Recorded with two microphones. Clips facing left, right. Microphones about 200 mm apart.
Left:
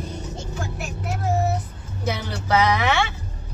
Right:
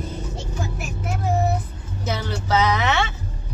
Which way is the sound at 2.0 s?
10° left (ahead or behind).